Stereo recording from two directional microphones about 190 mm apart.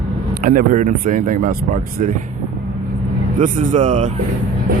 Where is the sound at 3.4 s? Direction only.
40° right (ahead or behind).